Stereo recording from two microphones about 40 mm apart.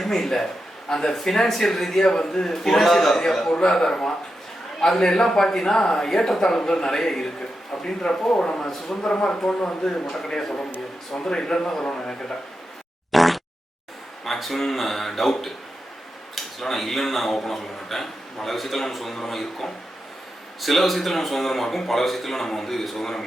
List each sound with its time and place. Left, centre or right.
0.0 s a man's voice: centre
10.2 s a man's voice: left
13.1 s fart: centre
14.3 s a man's voice: centre